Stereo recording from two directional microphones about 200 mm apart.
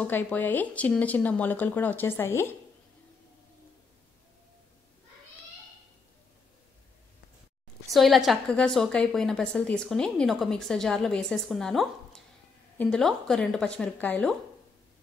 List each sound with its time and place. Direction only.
0.0 s speech: 10° left (ahead or behind)
7.9 s a woman's voice: centre (ahead or behind)